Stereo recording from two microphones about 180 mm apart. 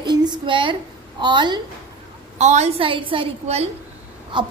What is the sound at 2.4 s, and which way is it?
A woman's voice, 40° right (ahead or behind).